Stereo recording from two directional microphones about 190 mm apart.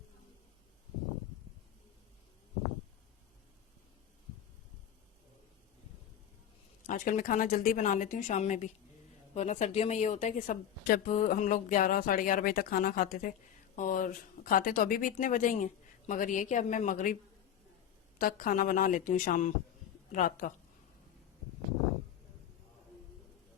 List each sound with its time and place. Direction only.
6.8 s a woman's voice: 45° left (ahead or behind)
18.2 s speech: 50° left (ahead or behind)